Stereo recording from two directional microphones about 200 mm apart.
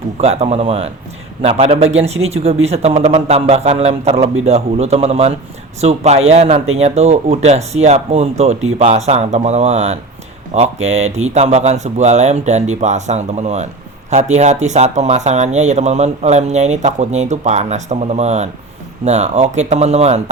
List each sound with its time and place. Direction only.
0.2 s speech: 30° right (ahead or behind)